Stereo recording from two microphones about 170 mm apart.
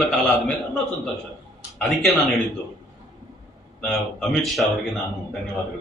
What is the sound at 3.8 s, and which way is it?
Speech, centre (ahead or behind).